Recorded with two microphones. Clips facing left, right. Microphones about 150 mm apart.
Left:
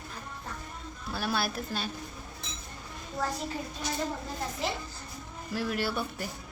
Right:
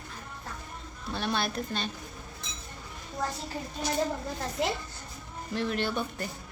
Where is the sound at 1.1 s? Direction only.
5° left (ahead or behind).